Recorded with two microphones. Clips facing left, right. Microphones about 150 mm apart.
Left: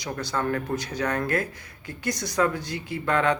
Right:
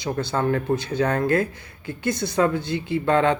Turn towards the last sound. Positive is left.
turn(degrees=-30)  # may be behind; listen again after turning